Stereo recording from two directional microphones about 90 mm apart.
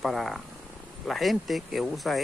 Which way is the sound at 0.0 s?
Centre (ahead or behind).